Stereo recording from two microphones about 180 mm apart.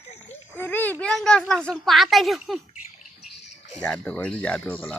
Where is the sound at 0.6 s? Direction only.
10° left (ahead or behind).